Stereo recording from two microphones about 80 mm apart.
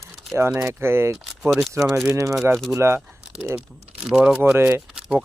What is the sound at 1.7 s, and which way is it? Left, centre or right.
Speech, right.